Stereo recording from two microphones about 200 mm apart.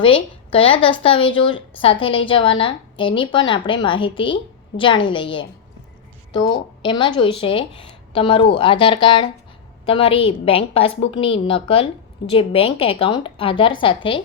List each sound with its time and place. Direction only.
0.0 s a woman's voice: 25° left (ahead or behind)